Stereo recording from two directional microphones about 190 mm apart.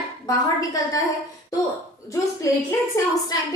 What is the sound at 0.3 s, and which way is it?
Speech, 20° left (ahead or behind).